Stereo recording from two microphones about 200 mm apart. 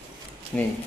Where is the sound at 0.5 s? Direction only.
Centre (ahead or behind).